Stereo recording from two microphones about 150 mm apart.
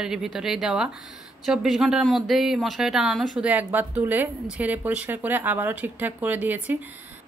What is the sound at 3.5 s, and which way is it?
A woman's voice, 10° right (ahead or behind).